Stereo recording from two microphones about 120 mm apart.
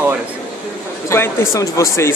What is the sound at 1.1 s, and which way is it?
Speech, 20° left (ahead or behind).